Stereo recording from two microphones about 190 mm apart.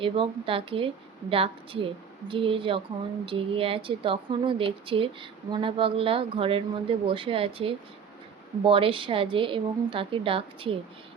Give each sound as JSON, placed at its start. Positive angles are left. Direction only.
{"t": 0.0, "sound": "speech", "side_deg": -30}